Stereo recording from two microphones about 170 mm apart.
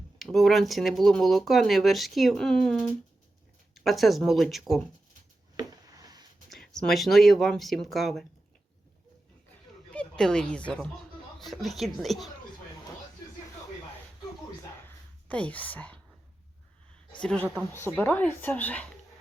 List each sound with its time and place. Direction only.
0.2 s speech: centre (ahead or behind)
5.5 s a sound: 20° right (ahead or behind)
6.5 s speech: 5° left (ahead or behind)
9.9 s speech: 5° left (ahead or behind)
14.8 s whispering: 10° left (ahead or behind)
17.2 s speech: 5° left (ahead or behind)
17.4 s speech: 5° right (ahead or behind)
17.7 s speech: 15° left (ahead or behind)